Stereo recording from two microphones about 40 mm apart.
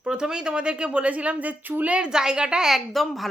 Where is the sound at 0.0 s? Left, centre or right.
Right.